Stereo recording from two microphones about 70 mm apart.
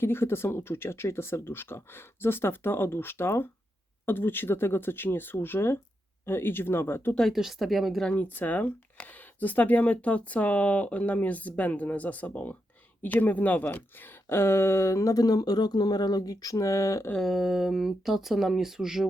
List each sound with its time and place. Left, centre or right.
0.0 s speech: left
7.3 s speech: centre
8.1 s speech: left
17.2 s speech: centre